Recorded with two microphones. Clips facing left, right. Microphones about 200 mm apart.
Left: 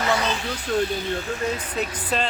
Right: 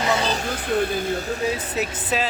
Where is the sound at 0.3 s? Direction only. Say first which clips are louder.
Right 2 dB; 45° right (ahead or behind).